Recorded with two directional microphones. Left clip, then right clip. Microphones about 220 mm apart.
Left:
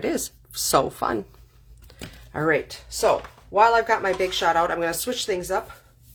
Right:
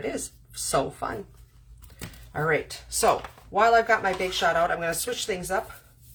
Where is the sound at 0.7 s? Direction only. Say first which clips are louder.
Left 5 dB; 50° left (ahead or behind).